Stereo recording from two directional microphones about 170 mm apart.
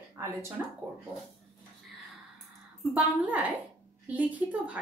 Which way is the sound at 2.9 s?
10° right (ahead or behind).